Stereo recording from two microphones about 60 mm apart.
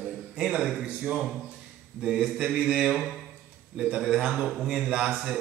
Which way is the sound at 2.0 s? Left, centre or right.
Centre.